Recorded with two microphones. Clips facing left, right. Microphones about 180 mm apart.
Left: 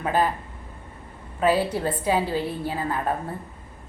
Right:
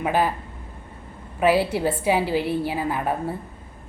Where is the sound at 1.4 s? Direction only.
10° right (ahead or behind).